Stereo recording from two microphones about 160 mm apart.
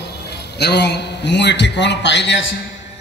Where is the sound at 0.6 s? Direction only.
90° left.